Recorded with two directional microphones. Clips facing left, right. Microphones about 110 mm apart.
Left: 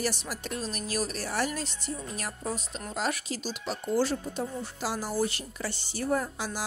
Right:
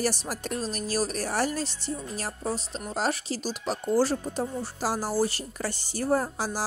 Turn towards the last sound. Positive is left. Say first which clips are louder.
# right 3 dB
turn(degrees=-35)  # may be behind; listen again after turning